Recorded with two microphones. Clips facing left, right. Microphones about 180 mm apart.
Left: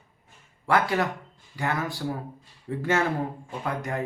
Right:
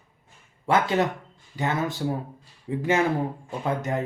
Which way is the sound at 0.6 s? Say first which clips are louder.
Right 2 dB; 20° right (ahead or behind).